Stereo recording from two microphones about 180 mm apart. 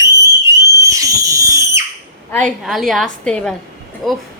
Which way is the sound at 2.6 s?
Centre (ahead or behind).